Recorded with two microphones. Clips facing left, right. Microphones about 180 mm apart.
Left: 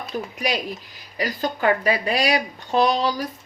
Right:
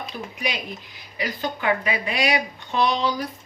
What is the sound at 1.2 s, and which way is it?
A woman's voice, 40° left (ahead or behind).